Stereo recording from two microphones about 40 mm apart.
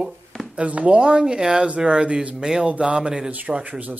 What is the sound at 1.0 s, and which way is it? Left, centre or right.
Speech, right.